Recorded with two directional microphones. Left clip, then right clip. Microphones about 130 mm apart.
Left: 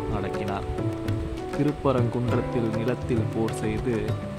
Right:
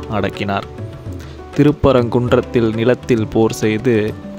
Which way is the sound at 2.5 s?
75° right (ahead or behind).